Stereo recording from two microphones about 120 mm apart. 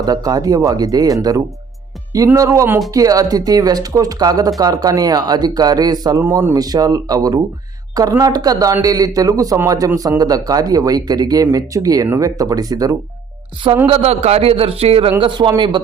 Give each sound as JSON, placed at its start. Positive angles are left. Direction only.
{"t": 0.0, "sound": "speech", "side_deg": -30}
{"t": 13.8, "sound": "a man's voice", "side_deg": -55}
{"t": 15.2, "sound": "speech", "side_deg": -40}